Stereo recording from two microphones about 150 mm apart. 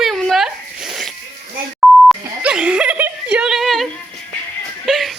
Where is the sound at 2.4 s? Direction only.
5° right (ahead or behind).